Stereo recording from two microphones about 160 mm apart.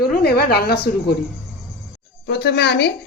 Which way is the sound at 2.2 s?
90° left.